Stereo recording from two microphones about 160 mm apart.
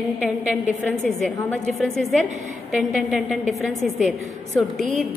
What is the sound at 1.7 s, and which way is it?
A woman's voice, 5° left (ahead or behind).